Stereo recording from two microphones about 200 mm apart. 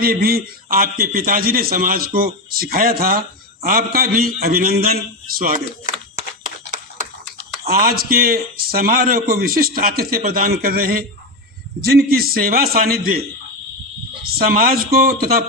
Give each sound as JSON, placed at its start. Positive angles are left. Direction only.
{"t": 0.0, "sound": "a man's voice", "side_deg": -50}
{"t": 7.7, "sound": "a man's voice", "side_deg": -50}
{"t": 14.3, "sound": "a man's voice", "side_deg": -50}